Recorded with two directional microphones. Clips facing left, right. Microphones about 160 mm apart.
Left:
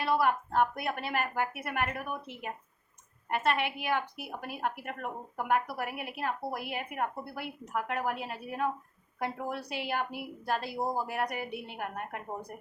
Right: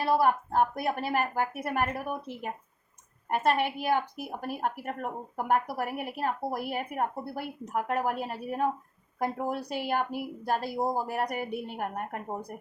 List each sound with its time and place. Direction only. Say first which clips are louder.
0.0 s a woman's voice: right 3 dB; 40° right (ahead or behind)